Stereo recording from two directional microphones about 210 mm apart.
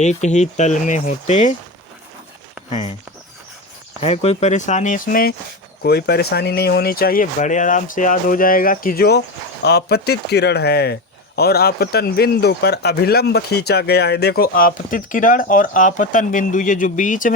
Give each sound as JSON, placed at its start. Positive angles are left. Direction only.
{"t": 0.0, "sound": "speech", "side_deg": 35}
{"t": 2.6, "sound": "speech", "side_deg": 30}
{"t": 4.0, "sound": "speech", "side_deg": 30}